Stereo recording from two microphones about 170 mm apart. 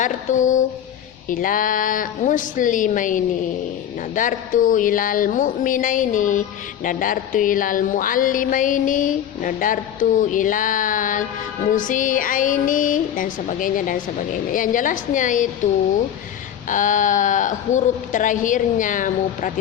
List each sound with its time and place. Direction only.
0.0 s a woman's voice: 45° left (ahead or behind)
16.6 s a woman's voice: 50° left (ahead or behind)